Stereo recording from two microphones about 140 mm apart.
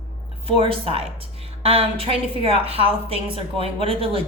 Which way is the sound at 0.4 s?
40° right (ahead or behind).